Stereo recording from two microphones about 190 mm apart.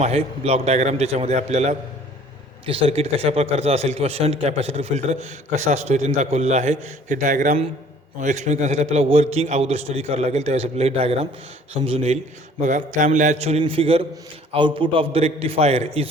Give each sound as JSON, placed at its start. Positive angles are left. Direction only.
{"t": 0.0, "sound": "a man's voice", "side_deg": -35}